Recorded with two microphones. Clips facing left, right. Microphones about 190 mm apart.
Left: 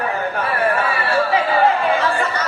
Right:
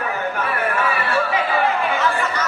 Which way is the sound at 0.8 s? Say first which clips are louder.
Left 2 dB; 30° left (ahead or behind).